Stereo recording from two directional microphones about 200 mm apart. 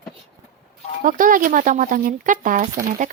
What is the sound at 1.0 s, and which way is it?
Speech, 40° right (ahead or behind).